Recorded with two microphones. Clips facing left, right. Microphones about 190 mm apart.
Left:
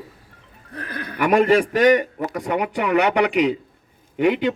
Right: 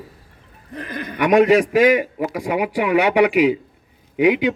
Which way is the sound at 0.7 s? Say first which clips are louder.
Right 3 dB; 20° right (ahead or behind).